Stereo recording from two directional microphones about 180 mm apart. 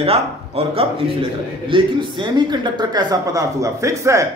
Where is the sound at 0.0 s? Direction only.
35° right (ahead or behind).